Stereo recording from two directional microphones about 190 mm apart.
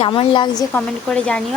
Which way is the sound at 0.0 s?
25° left (ahead or behind).